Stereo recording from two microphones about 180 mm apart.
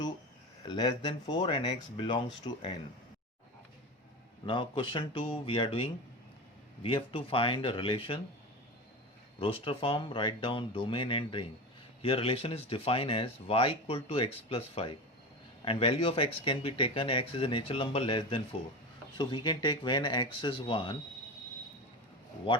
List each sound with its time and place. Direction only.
0.7 s speech: 25° left (ahead or behind)
4.4 s speech: 25° left (ahead or behind)
9.4 s speech: 30° left (ahead or behind)